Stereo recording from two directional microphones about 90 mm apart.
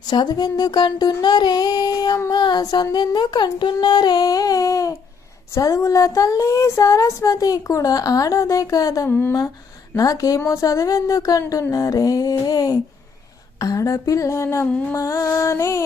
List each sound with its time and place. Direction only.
0.1 s a sound: 50° left (ahead or behind); by 4.9 s 35° left (ahead or behind)
5.5 s speech: 40° left (ahead or behind)
9.0 s speech: 20° left (ahead or behind)
9.9 s speech: 40° left (ahead or behind)